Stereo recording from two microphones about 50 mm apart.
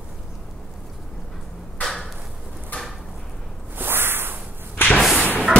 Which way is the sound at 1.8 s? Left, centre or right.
Centre.